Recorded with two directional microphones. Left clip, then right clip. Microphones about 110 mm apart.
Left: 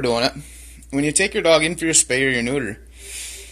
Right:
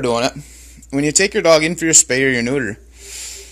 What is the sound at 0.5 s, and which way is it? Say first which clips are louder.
Speech: right 3 dB; 80° right.